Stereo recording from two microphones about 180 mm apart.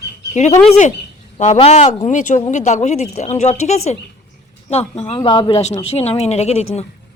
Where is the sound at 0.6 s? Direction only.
40° left (ahead or behind).